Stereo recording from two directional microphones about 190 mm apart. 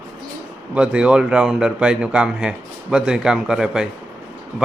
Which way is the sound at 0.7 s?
5° right (ahead or behind).